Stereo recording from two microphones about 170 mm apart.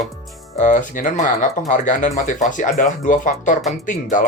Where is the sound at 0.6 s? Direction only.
50° left (ahead or behind).